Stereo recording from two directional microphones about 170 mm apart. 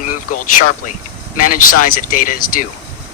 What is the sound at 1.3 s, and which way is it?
Speech, 55° left (ahead or behind).